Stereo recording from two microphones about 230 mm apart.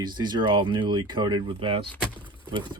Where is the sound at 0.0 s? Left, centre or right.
Centre.